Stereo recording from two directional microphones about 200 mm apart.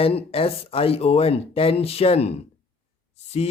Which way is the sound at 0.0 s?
30° left (ahead or behind).